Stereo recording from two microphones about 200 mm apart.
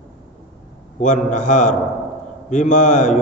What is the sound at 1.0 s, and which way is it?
A man's voice, 40° left (ahead or behind).